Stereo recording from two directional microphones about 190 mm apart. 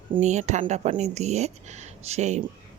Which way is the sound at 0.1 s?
35° right (ahead or behind).